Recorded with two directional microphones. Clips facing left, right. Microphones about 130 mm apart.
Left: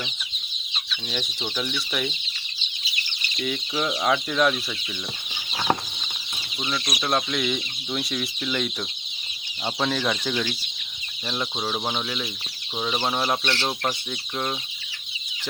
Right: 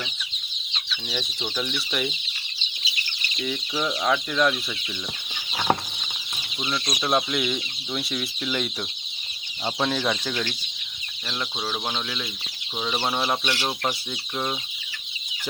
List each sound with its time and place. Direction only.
0.7 s chicken: centre (ahead or behind)
1.9 s speech: centre (ahead or behind)
3.4 s speech: centre (ahead or behind)
5.3 s chicken: centre (ahead or behind)
6.6 s speech: 5° right (ahead or behind)
6.8 s speech: 5° left (ahead or behind)
7.1 s speech: 5° right (ahead or behind)
11.6 s speech: 5° left (ahead or behind)